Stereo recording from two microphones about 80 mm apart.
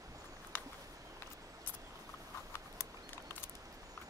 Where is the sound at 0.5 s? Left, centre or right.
Left.